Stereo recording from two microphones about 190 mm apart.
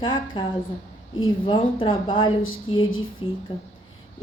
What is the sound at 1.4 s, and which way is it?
A woman's voice, 25° left (ahead or behind).